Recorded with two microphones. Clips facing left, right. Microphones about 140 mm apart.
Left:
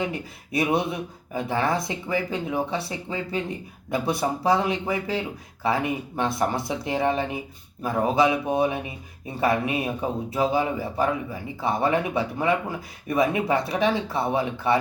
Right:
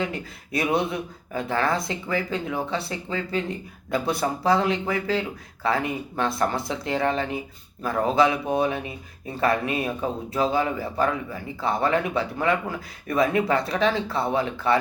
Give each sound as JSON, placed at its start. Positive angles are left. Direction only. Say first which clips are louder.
{"t": 0.0, "sound": "speech", "louder": "even", "side_deg": 15}